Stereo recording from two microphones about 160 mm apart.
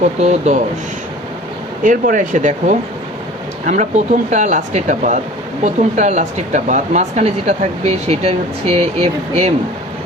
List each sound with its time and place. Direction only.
0.0 s speech: 45° right (ahead or behind)
1.8 s speech: 55° right (ahead or behind); by 9.5 s 40° right (ahead or behind)